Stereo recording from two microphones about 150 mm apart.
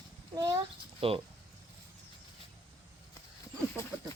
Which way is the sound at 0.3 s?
25° right (ahead or behind).